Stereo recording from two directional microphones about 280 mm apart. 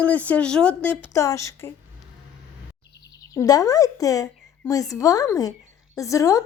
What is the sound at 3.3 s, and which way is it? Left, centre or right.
A woman's voice, centre.